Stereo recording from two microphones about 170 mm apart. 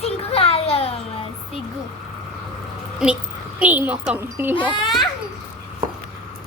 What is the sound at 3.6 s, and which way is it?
Speech, 10° right (ahead or behind).